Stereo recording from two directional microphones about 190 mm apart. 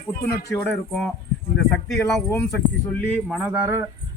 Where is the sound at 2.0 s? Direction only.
10° left (ahead or behind).